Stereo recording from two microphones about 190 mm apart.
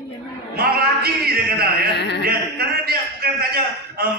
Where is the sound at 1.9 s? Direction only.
65° left (ahead or behind).